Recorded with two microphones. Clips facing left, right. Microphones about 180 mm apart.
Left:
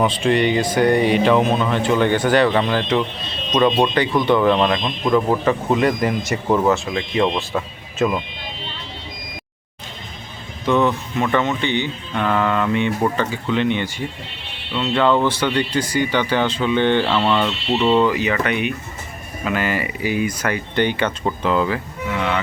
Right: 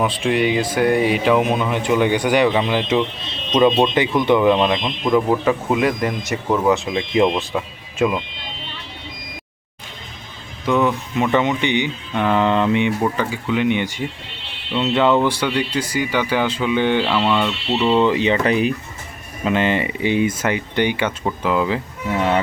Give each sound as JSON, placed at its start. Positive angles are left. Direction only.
{"t": 0.0, "sound": "speech", "side_deg": -5}
{"t": 6.7, "sound": "speech", "side_deg": -20}
{"t": 10.7, "sound": "speech", "side_deg": -10}
{"t": 17.9, "sound": "speech", "side_deg": -25}
{"t": 22.1, "sound": "speech", "side_deg": -40}